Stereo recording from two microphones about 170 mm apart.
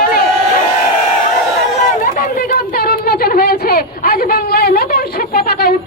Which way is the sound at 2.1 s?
55° left (ahead or behind).